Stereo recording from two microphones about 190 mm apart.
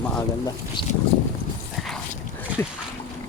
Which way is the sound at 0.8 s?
25° left (ahead or behind).